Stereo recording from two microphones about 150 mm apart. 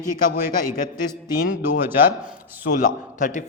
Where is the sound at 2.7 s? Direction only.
65° left (ahead or behind).